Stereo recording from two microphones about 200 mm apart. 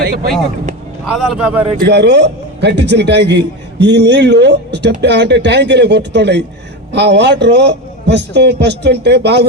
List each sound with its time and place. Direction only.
0.0 s speech: 45° right (ahead or behind)
1.0 s a man's voice: 5° right (ahead or behind)
1.8 s a man's voice: 60° right (ahead or behind)